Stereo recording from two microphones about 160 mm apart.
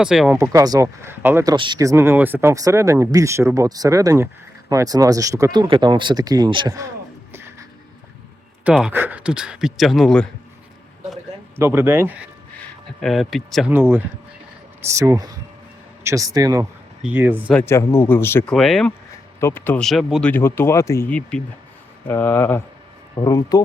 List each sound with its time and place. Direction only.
0.0 s speech: 5° right (ahead or behind)
0.3 s speech: 20° right (ahead or behind)
1.5 s speech: 30° right (ahead or behind)
8.6 s speech: 5° right (ahead or behind)
11.5 s speech: 15° right (ahead or behind)
13.0 s speech: centre (ahead or behind)
13.7 s speech: 15° right (ahead or behind)
17.0 s speech: 10° right (ahead or behind)
17.5 s speech: 5° left (ahead or behind)
18.5 s speech: centre (ahead or behind)
19.4 s speech: 15° left (ahead or behind)
19.8 s speech: centre (ahead or behind)
20.2 s speech: 15° left (ahead or behind)